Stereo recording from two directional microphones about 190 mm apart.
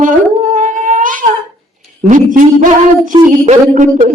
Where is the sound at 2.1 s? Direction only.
45° right (ahead or behind).